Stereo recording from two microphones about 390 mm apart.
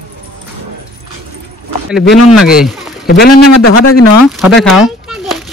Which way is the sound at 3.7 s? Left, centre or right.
Left.